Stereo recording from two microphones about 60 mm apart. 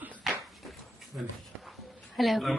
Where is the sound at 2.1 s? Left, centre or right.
Centre.